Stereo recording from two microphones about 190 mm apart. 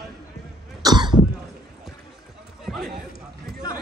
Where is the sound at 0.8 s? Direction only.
20° right (ahead or behind).